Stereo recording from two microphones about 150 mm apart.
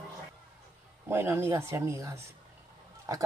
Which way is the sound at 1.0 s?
15° right (ahead or behind).